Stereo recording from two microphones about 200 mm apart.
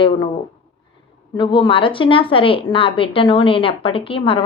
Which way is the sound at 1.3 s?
25° left (ahead or behind).